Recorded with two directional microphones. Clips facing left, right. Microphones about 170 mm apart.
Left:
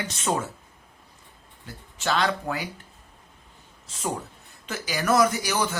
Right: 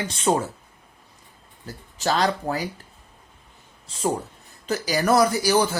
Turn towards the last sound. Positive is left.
turn(degrees=-35)  # may be behind; listen again after turning